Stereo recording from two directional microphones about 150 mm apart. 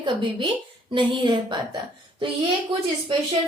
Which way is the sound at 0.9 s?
30° right (ahead or behind).